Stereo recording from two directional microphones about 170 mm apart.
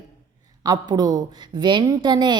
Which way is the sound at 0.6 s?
25° right (ahead or behind).